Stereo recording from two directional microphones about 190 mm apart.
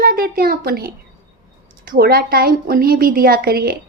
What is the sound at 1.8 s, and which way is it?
A woman's voice, 50° right (ahead or behind).